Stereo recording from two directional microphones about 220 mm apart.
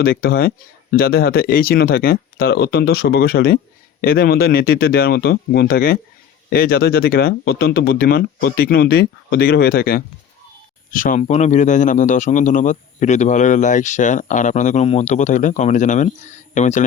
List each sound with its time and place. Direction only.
0.0 s speech: 45° left (ahead or behind)